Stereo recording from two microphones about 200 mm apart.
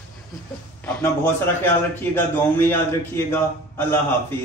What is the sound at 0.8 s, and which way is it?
A man's voice, 10° left (ahead or behind).